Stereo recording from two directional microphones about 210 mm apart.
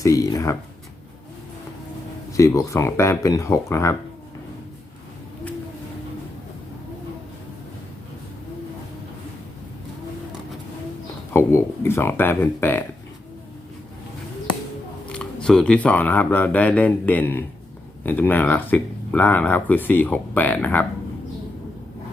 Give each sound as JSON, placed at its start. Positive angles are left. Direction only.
{"t": 0.0, "sound": "speech", "side_deg": 15}
{"t": 2.3, "sound": "speech", "side_deg": 15}
{"t": 11.3, "sound": "speech", "side_deg": 10}
{"t": 15.1, "sound": "speech", "side_deg": 5}